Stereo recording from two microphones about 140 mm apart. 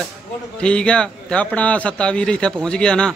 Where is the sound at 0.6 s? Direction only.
5° left (ahead or behind).